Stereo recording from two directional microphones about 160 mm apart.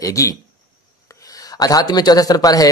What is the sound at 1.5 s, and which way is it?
Speech, 25° left (ahead or behind).